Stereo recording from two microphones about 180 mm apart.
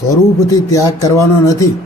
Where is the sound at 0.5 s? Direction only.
15° left (ahead or behind).